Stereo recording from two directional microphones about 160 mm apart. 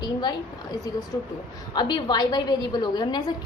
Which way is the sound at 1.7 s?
30° left (ahead or behind).